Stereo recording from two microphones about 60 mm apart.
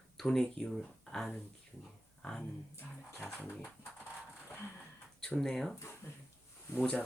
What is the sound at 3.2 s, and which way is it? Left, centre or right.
Speech, left.